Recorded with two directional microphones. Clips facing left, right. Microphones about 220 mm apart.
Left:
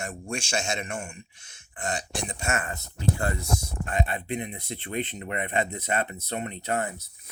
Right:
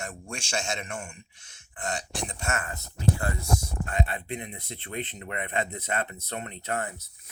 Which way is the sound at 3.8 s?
20° left (ahead or behind).